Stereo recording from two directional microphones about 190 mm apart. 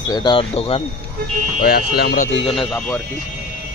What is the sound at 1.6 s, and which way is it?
Speech, 55° left (ahead or behind).